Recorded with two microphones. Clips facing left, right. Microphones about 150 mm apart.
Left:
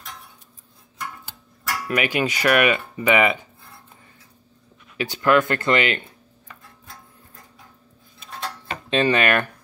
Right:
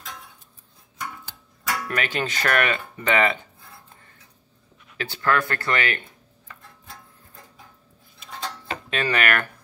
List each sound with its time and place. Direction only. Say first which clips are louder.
1.9 s speech: left 7 dB; 10° left (ahead or behind)
4.9 s speech: left 5 dB; 15° left (ahead or behind)
8.9 s speech: left 5 dB; 20° left (ahead or behind)